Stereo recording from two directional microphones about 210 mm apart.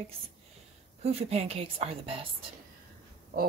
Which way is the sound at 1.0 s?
30° right (ahead or behind).